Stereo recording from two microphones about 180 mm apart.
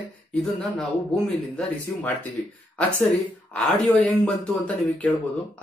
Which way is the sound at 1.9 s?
15° left (ahead or behind).